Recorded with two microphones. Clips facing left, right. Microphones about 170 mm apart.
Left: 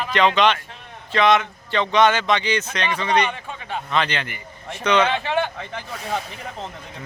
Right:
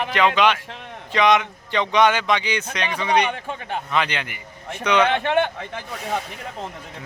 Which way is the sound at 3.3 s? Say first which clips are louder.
Right 2 dB; 50° right (ahead or behind).